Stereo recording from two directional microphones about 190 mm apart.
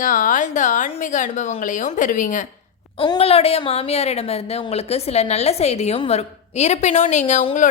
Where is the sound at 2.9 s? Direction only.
30° left (ahead or behind).